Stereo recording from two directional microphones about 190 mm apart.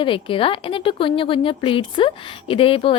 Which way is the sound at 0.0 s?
25° left (ahead or behind).